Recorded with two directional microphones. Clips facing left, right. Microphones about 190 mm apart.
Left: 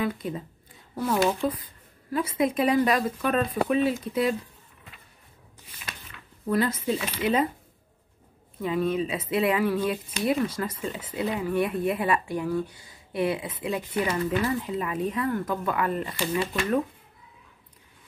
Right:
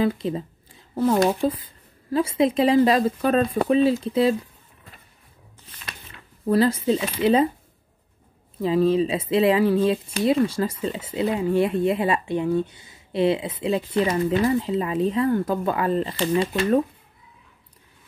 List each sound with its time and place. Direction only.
0.0 s speech: 30° right (ahead or behind)
6.4 s speech: 30° right (ahead or behind)
8.5 s speech: 30° right (ahead or behind)